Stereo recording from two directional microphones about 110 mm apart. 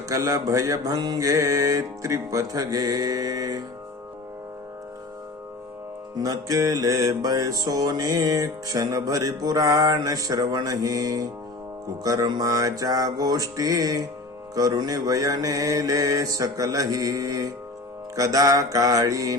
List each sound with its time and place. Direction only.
0.1 s music: 30° right (ahead or behind)
6.1 s music: 35° right (ahead or behind)